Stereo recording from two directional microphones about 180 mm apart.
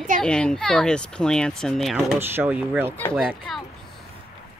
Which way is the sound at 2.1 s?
10° right (ahead or behind).